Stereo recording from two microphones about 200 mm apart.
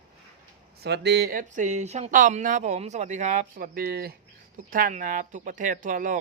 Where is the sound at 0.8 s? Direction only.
55° right (ahead or behind).